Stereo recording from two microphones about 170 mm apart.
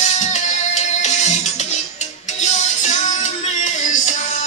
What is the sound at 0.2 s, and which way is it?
Music, 45° left (ahead or behind).